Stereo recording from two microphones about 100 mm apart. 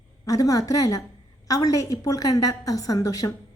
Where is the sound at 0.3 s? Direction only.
35° left (ahead or behind).